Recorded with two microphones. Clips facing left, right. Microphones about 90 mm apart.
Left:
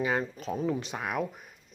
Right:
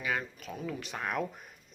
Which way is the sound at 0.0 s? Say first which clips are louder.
Left 5 dB; 30° left (ahead or behind).